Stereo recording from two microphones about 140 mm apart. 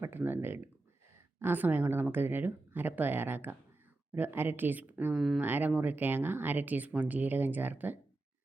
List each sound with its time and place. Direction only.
0.0 s speech: 15° right (ahead or behind)